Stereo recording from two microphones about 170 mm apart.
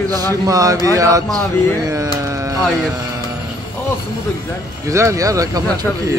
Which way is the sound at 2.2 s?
20° right (ahead or behind).